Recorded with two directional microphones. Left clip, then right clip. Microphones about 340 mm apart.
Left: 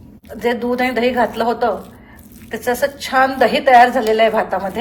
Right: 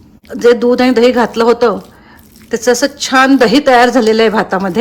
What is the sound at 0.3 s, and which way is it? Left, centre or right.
A woman's voice, centre.